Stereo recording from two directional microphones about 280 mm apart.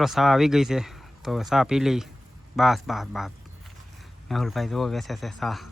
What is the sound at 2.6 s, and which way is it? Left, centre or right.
Speech, centre.